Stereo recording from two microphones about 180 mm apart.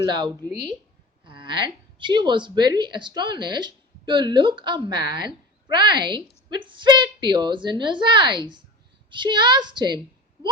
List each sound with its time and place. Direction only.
0.0 s a woman's voice: 20° right (ahead or behind)